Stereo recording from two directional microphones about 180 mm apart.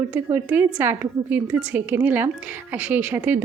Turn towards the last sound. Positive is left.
turn(degrees=-10)  # may be behind; listen again after turning